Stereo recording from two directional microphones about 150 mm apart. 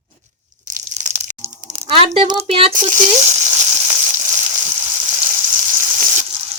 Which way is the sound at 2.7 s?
55° right (ahead or behind).